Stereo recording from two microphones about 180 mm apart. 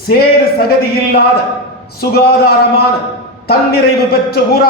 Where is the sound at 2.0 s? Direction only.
60° left (ahead or behind).